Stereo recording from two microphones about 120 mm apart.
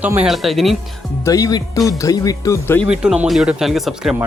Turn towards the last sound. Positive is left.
turn(degrees=0)  # may be behind; listen again after turning